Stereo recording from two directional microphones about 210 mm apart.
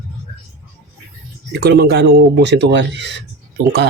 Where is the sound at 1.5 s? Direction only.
50° right (ahead or behind).